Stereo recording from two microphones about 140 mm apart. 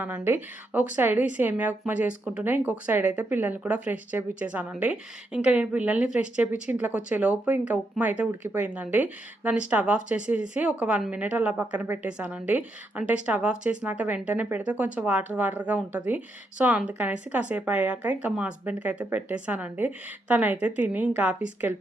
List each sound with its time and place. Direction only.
0.0 s speech: 15° right (ahead or behind)